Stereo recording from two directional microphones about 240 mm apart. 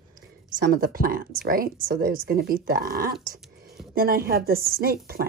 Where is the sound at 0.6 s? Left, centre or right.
Right.